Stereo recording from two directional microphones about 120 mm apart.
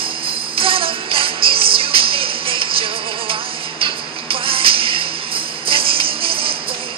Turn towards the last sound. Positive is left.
turn(degrees=-50)  # may be behind; listen again after turning